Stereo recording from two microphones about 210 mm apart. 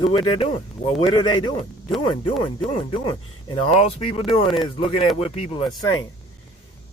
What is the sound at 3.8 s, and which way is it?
Speech, 25° left (ahead or behind).